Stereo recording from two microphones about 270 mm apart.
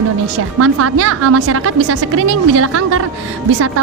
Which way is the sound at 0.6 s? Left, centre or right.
Right.